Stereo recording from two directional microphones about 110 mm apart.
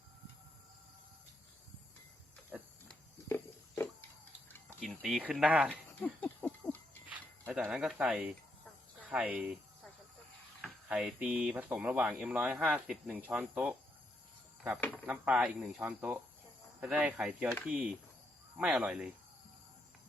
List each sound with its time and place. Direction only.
2.5 s pig: centre (ahead or behind)
3.2 s pig: 20° left (ahead or behind)
4.8 s speech: centre (ahead or behind)
6.0 s a sound: 15° left (ahead or behind)
7.1 s a sound: 10° right (ahead or behind)
7.7 s speech: 5° right (ahead or behind)
10.8 s speech: 10° right (ahead or behind)
15.0 s speech: 15° right (ahead or behind)